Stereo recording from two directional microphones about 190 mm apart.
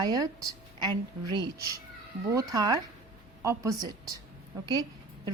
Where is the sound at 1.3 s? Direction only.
20° right (ahead or behind).